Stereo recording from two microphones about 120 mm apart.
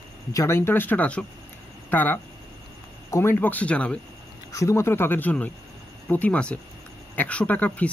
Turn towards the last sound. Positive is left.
turn(degrees=15)  # may be behind; listen again after turning